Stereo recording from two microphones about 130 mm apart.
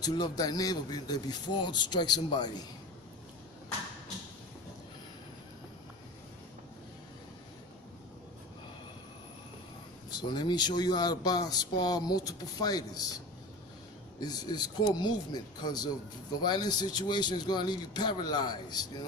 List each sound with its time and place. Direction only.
0.0 s speech: 30° left (ahead or behind)
10.1 s speech: 35° left (ahead or behind)
14.2 s speech: 30° left (ahead or behind)